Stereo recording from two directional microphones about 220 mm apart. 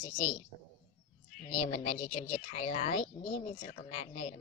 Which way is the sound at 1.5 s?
30° left (ahead or behind).